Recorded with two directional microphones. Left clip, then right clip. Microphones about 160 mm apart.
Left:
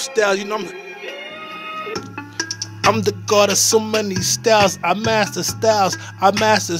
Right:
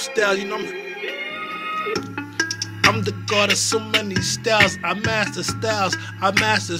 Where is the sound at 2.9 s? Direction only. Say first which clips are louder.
Left 5 dB; 45° left (ahead or behind).